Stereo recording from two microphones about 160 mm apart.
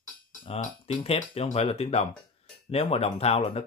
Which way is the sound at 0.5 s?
40° left (ahead or behind).